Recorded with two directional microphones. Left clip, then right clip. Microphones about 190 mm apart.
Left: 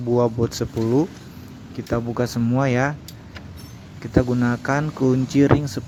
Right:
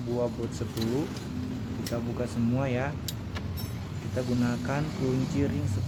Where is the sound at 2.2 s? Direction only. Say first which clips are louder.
Left 8 dB; 45° left (ahead or behind).